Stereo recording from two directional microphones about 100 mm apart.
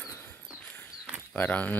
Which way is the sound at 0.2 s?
20° left (ahead or behind).